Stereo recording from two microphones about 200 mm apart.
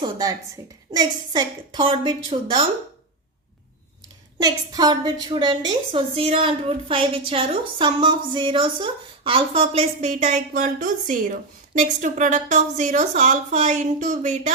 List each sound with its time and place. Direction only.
0.0 s a woman's voice: 20° right (ahead or behind)
4.4 s a woman's voice: 20° right (ahead or behind); by 14.5 s 40° right (ahead or behind)